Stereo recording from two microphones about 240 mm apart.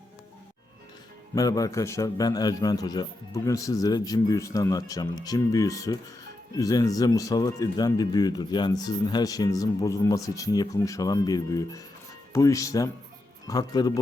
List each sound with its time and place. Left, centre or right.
1.4 s speech: centre